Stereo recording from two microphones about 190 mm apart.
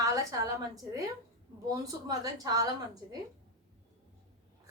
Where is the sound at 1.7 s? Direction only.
20° right (ahead or behind).